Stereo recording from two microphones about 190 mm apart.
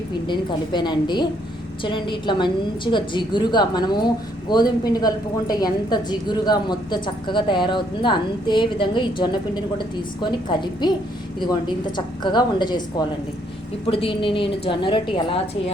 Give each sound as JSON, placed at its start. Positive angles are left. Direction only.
{"t": 0.3, "sound": "a woman's voice", "side_deg": 25}